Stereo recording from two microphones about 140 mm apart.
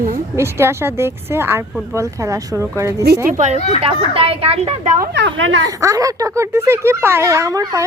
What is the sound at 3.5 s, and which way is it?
Speech, 50° left (ahead or behind).